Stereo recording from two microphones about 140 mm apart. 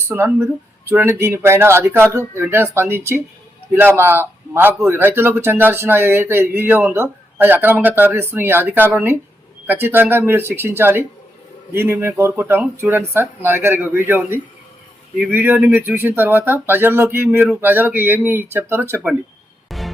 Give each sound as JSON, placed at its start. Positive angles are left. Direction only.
{"t": 0.1, "sound": "a man's voice", "side_deg": -15}
{"t": 19.7, "sound": "music", "side_deg": 0}